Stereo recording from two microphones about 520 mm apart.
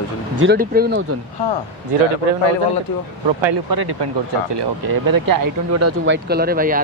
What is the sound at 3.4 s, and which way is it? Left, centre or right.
Speech, right.